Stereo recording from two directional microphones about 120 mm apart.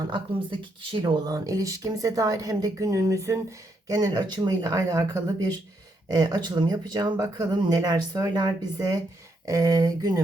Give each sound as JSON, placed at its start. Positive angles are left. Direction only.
{"t": 0.8, "sound": "speech", "side_deg": -40}